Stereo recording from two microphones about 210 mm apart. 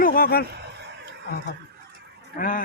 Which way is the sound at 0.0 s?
45° left (ahead or behind).